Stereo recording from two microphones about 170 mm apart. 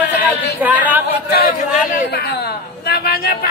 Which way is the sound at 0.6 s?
10° right (ahead or behind).